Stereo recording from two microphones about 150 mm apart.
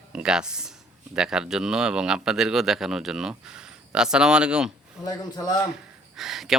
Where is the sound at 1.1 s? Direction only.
5° right (ahead or behind).